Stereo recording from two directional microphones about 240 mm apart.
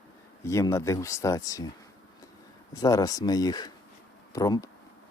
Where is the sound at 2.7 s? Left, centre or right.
Centre.